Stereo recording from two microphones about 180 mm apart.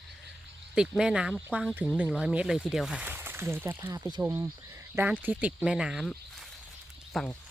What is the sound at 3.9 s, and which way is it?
Speech, 20° right (ahead or behind).